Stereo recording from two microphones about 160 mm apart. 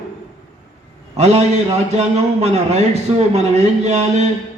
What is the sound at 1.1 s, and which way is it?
A man's voice, 40° right (ahead or behind).